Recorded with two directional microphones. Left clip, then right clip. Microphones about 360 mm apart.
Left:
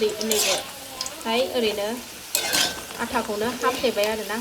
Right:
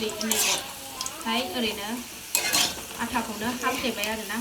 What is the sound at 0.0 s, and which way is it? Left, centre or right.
Speech, centre.